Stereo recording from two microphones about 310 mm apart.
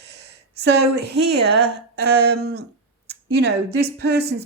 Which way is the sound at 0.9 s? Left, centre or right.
Right.